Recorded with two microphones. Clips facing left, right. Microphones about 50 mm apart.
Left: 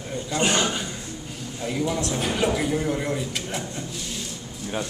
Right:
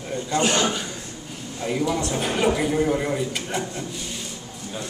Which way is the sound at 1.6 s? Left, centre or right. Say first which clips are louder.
Right 2 dB; centre.